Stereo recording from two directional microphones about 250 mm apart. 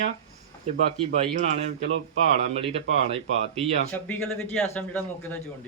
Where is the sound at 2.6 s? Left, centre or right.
Right.